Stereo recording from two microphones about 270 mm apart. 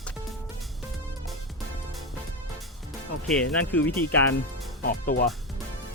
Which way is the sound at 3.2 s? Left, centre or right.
Centre.